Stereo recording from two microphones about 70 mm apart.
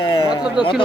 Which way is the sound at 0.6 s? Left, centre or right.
Centre.